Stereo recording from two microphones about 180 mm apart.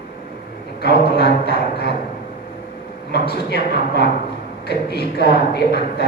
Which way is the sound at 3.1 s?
65° left (ahead or behind).